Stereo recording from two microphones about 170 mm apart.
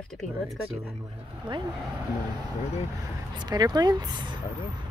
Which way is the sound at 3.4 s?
25° right (ahead or behind).